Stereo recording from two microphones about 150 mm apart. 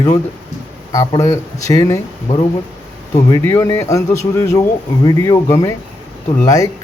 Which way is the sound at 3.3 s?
20° left (ahead or behind).